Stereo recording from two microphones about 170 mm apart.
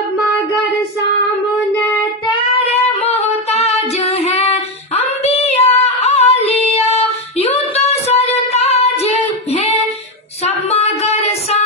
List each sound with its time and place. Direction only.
2.3 s child singing: 35° left (ahead or behind)
10.4 s music: 40° left (ahead or behind)